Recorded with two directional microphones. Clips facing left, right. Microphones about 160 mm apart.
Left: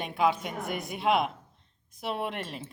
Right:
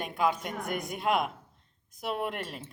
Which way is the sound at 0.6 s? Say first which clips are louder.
Right 1 dB; 45° right (ahead or behind).